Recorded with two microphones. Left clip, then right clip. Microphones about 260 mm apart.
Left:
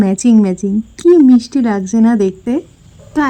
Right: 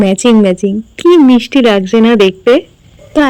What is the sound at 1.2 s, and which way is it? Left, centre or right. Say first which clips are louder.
Speech: right 4 dB; right.